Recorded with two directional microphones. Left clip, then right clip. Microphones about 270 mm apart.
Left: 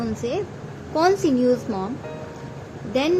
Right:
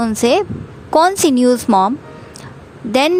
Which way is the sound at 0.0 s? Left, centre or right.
Right.